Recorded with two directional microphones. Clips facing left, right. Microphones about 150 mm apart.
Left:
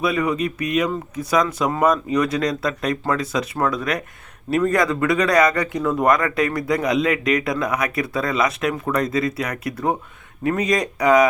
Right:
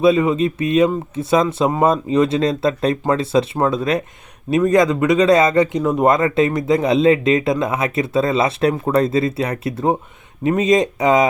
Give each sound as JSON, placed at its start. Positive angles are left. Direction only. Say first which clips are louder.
{"t": 0.0, "sound": "speech", "louder": "right 6 dB", "side_deg": -25}